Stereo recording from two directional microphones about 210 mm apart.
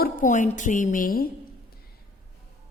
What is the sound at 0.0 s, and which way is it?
A woman's voice, 40° left (ahead or behind).